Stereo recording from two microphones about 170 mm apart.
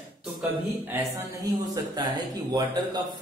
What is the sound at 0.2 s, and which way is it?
Speech, 10° right (ahead or behind).